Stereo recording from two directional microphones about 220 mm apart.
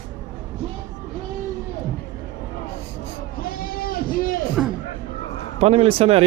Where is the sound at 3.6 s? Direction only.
40° left (ahead or behind).